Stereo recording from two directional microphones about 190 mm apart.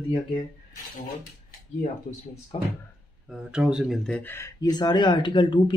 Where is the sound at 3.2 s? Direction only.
5° right (ahead or behind).